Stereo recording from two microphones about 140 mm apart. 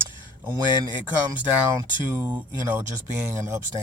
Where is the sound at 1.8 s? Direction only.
15° right (ahead or behind).